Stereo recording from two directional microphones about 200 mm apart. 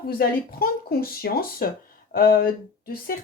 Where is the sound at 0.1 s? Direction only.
50° left (ahead or behind).